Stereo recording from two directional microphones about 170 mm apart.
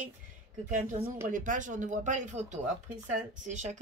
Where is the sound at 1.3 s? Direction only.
50° right (ahead or behind).